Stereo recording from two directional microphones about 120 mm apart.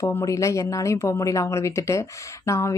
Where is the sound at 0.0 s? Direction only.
25° left (ahead or behind).